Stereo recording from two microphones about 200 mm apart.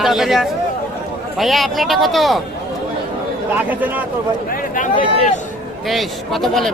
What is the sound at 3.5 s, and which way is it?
Speech, 10° right (ahead or behind).